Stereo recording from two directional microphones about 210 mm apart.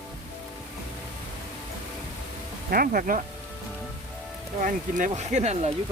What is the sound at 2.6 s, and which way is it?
Speech, 45° right (ahead or behind).